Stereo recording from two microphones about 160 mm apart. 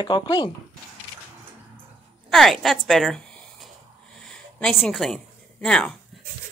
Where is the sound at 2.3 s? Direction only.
Centre (ahead or behind).